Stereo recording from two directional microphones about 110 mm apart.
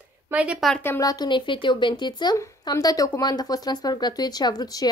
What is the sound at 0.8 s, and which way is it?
Speech, 30° left (ahead or behind).